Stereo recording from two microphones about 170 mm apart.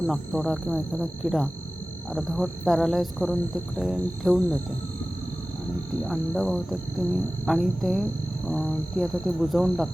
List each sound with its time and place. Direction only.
0.1 s speech: centre (ahead or behind)
5.9 s speech: centre (ahead or behind)